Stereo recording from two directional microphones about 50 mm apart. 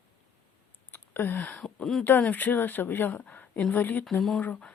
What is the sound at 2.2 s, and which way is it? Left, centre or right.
A woman's voice, left.